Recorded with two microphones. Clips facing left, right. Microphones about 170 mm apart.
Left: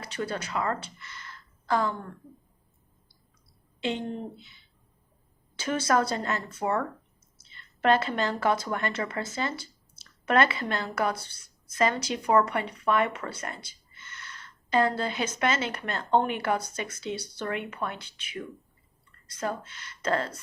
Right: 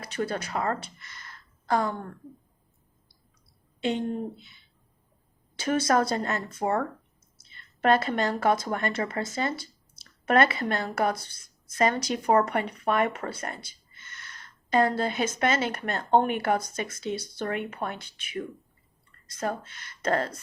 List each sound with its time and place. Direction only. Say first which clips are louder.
0.0 s a woman's voice: right 2 dB; 50° right (ahead or behind)
3.8 s a woman's voice: right 3 dB; 45° right (ahead or behind)
5.6 s a woman's voice: right 2 dB; 40° right (ahead or behind)
12.5 s a woman's voice: right 1 dB; 50° right (ahead or behind)
14.7 s a woman's voice: right 2 dB; 45° right (ahead or behind)